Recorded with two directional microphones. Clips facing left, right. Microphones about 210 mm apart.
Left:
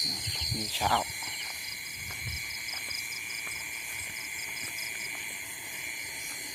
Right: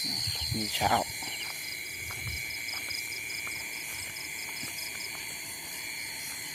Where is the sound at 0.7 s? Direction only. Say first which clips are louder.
Right 1 dB; 15° right (ahead or behind).